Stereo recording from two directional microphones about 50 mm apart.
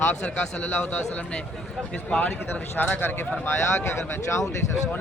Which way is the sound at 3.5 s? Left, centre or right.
Left.